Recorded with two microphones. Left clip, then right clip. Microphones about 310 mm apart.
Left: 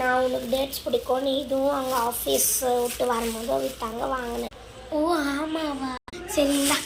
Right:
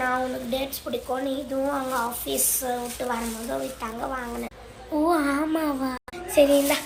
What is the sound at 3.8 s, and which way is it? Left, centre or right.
A child's voice, centre.